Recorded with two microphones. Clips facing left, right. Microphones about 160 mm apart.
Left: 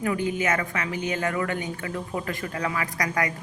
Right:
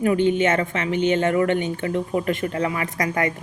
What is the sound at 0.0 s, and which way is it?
A woman's voice, 25° right (ahead or behind).